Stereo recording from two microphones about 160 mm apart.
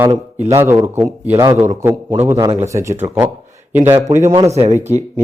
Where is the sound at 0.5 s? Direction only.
15° right (ahead or behind).